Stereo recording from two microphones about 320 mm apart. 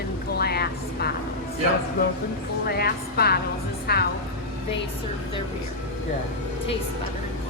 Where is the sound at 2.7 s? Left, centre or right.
Left.